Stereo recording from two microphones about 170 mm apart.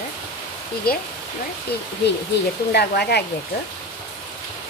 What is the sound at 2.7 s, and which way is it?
Speech, 70° left (ahead or behind).